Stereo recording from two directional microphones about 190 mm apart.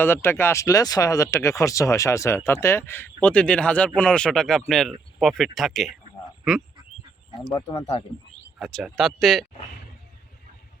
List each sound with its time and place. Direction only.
0.0 s speech: 10° left (ahead or behind)
7.5 s speech: 30° left (ahead or behind)
8.5 s speech: centre (ahead or behind)